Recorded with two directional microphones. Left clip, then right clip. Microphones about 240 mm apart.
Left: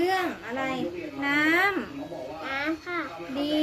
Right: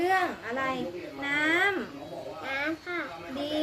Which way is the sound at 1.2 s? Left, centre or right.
Left.